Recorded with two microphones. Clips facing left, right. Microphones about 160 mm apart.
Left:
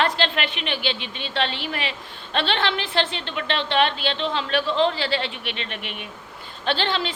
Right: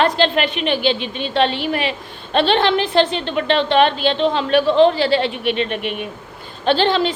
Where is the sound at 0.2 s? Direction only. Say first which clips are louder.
Right 8 dB; 50° right (ahead or behind).